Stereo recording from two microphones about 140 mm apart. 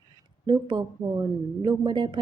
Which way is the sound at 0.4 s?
30° right (ahead or behind).